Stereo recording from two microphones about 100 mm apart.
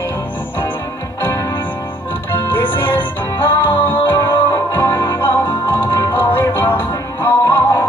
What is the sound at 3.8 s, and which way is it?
Music, 20° left (ahead or behind).